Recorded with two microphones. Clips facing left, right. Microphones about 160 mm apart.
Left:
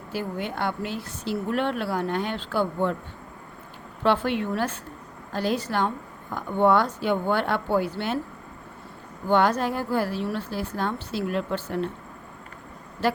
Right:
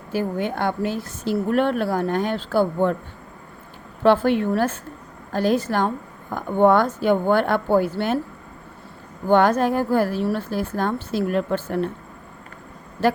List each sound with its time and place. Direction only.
0.1 s a woman's voice: 45° right (ahead or behind)
4.0 s a woman's voice: 45° right (ahead or behind)
9.2 s a woman's voice: 50° right (ahead or behind)